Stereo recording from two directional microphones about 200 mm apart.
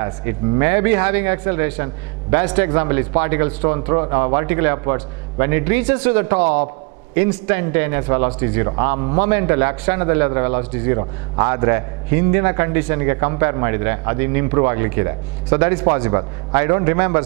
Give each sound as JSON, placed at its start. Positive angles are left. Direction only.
{"t": 0.0, "sound": "a man's voice", "side_deg": -15}